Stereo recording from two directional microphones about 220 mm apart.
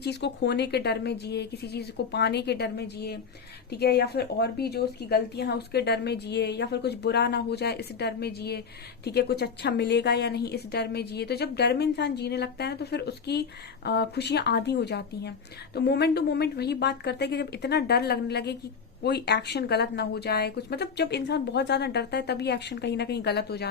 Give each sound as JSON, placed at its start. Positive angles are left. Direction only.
{"t": 0.0, "sound": "a woman's voice", "side_deg": 50}